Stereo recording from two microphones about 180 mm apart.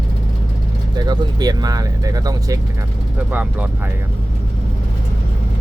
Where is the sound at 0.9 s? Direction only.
20° right (ahead or behind).